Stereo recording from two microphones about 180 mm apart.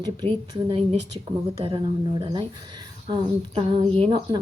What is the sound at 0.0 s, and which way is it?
A woman's voice, 25° right (ahead or behind).